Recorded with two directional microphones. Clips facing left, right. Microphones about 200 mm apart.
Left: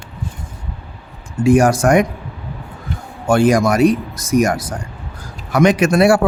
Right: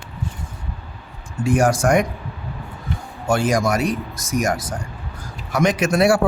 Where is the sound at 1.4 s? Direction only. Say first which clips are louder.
Left 5 dB; 65° left (ahead or behind).